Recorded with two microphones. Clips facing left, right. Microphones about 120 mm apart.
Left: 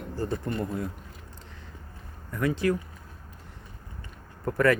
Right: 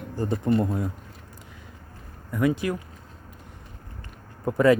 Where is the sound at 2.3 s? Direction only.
15° right (ahead or behind).